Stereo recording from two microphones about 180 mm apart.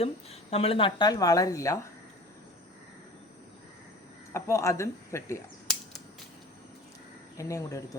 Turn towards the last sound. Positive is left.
turn(degrees=20)  # may be behind; listen again after turning